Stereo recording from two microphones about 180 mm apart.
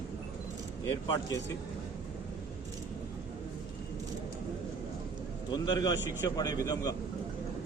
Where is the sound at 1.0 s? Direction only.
20° left (ahead or behind).